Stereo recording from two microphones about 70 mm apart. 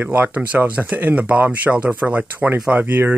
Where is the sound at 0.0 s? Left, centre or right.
Right.